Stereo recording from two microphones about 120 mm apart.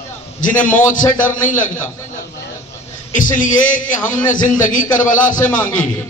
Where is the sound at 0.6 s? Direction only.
90° left.